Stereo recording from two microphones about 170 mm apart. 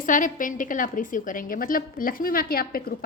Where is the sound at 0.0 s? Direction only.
50° left (ahead or behind).